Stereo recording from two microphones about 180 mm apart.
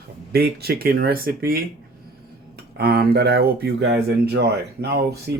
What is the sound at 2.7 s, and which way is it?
Speech, 60° right (ahead or behind).